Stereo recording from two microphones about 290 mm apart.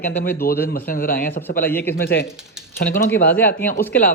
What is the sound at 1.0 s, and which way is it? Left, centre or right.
Speech, left.